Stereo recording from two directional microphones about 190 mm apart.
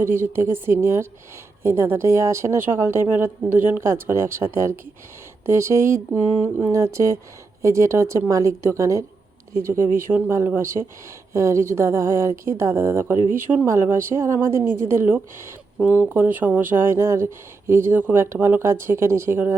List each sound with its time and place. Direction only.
0.0 s a woman's voice: 10° right (ahead or behind)